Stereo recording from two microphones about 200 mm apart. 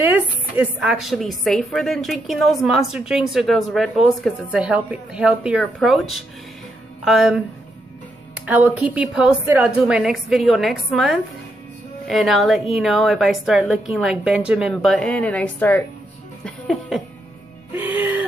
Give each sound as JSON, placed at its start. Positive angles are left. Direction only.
{"t": 0.0, "sound": "a woman's voice", "side_deg": -5}
{"t": 17.7, "sound": "music", "side_deg": -10}